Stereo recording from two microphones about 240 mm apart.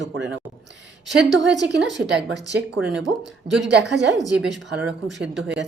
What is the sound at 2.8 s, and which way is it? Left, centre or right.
Speech, centre.